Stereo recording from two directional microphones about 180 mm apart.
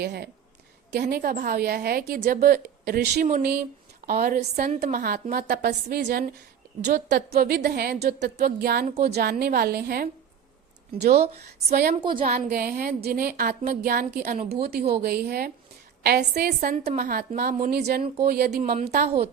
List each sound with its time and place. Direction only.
0.0 s a woman's voice: 65° right (ahead or behind)
11.7 s a woman's voice: 55° right (ahead or behind)
12.0 s a woman's voice: 25° right (ahead or behind)
12.5 s a woman's voice: 55° right (ahead or behind)
19.0 s a woman's voice: 35° right (ahead or behind)